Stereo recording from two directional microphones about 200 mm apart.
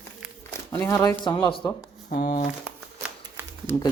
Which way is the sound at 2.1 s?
45° left (ahead or behind).